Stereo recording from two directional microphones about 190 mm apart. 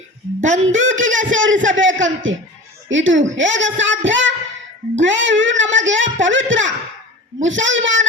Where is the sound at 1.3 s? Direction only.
90° right.